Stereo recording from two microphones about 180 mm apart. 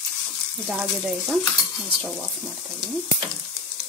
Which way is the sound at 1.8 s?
5° right (ahead or behind).